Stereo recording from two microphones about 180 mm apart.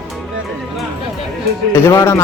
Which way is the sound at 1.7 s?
15° left (ahead or behind).